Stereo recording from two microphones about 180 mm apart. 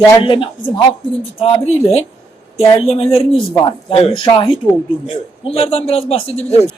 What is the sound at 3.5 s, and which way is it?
Speech, 20° left (ahead or behind).